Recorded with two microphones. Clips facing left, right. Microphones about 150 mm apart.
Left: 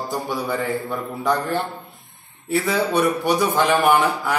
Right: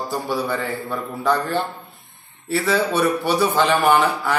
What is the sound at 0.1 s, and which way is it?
A man's voice, 15° left (ahead or behind).